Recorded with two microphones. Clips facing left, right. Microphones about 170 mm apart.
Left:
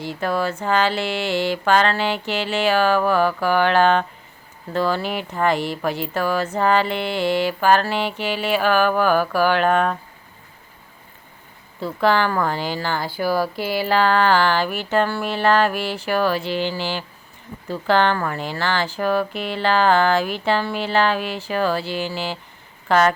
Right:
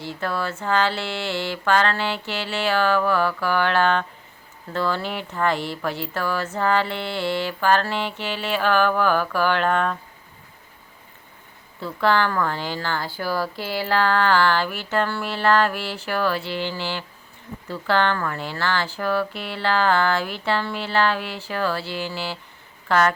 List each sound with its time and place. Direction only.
0.0 s a woman's voice: 15° left (ahead or behind)
11.9 s a woman's voice: 15° left (ahead or behind)